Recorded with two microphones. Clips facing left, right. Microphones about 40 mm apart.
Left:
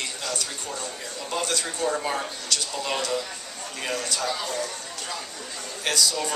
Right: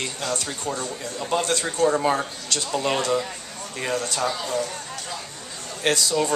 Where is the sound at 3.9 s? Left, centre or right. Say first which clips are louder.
Right 3 dB; right.